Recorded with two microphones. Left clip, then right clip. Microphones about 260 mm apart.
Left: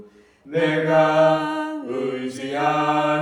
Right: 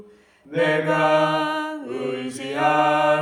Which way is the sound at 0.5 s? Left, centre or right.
Centre.